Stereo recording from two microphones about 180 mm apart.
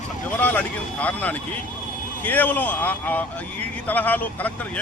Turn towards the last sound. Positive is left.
turn(degrees=10)  # may be behind; listen again after turning